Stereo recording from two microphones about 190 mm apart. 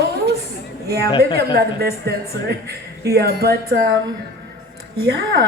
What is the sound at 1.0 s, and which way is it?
Speech, 25° left (ahead or behind).